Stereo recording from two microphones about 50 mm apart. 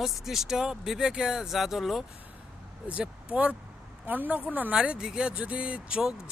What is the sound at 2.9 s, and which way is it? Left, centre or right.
Speech, right.